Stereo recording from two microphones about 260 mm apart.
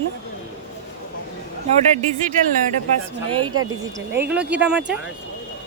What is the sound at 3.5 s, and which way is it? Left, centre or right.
Speech, right.